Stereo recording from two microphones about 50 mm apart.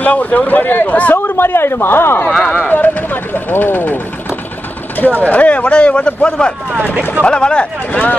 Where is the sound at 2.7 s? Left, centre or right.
Left; by 8.0 s centre.